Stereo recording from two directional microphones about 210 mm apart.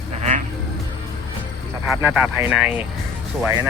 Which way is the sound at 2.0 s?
5° right (ahead or behind).